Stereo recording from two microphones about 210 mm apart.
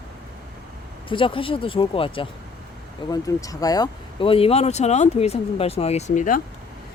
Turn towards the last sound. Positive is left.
turn(degrees=40)  # may be behind; listen again after turning